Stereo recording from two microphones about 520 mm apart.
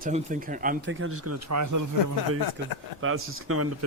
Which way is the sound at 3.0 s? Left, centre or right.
Right.